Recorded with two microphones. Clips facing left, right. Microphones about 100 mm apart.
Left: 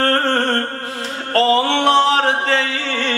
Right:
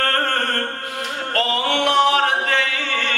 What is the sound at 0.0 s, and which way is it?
Music, 30° left (ahead or behind).